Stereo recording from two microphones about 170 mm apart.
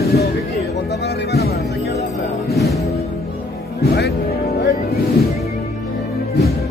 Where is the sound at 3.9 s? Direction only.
75° left (ahead or behind).